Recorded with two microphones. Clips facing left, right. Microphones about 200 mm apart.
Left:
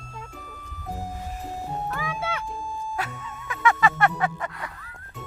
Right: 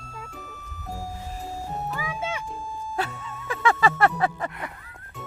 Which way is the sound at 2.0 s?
10° right (ahead or behind).